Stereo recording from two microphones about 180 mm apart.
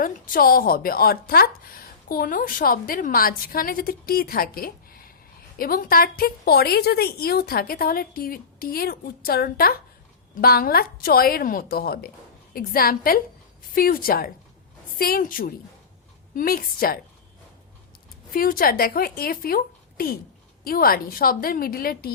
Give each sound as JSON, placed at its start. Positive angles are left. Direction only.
{"t": 0.0, "sound": "a woman's voice", "side_deg": 50}
{"t": 18.3, "sound": "a woman's voice", "side_deg": 50}